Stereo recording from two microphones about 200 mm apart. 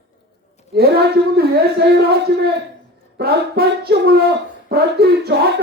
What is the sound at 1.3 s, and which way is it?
Speech, 55° right (ahead or behind).